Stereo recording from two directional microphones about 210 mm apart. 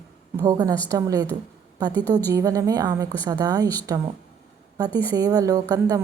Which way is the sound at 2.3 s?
15° right (ahead or behind).